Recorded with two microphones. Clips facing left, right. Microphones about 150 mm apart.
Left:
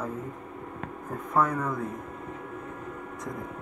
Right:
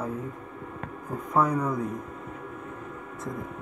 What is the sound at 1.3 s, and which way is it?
Speech, centre (ahead or behind).